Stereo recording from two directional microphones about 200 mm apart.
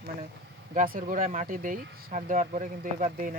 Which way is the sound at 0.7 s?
40° right (ahead or behind).